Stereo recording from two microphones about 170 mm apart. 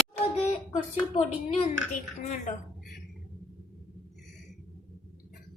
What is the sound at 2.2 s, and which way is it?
Speech, 45° left (ahead or behind).